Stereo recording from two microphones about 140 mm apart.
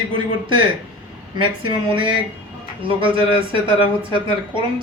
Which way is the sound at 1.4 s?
35° right (ahead or behind).